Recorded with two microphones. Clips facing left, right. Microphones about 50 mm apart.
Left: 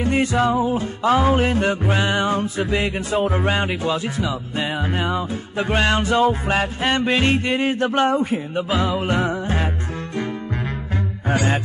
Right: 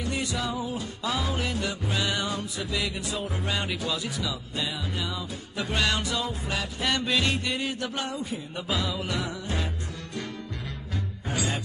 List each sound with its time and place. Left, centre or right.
0.0 s music: left
11.2 s music: left